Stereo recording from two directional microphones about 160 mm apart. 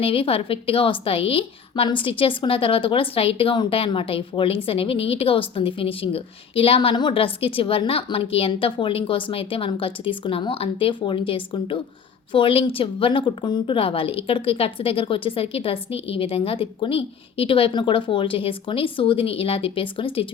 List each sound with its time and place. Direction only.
0.0 s a woman's voice: 35° left (ahead or behind)